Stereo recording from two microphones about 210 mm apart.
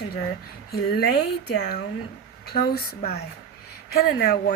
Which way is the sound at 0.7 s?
50° left (ahead or behind).